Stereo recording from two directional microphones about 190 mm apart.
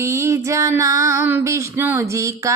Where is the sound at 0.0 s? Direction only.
15° right (ahead or behind).